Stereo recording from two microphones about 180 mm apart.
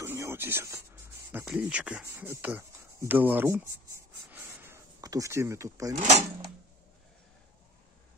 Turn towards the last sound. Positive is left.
turn(degrees=-40)  # may be behind; listen again after turning